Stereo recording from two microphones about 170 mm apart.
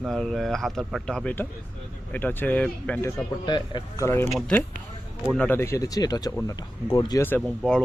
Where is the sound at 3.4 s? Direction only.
25° left (ahead or behind).